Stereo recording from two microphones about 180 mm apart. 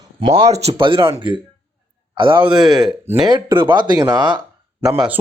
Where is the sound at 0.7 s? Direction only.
30° right (ahead or behind).